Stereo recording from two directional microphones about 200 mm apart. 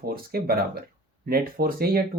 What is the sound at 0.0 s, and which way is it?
Speech, 50° right (ahead or behind).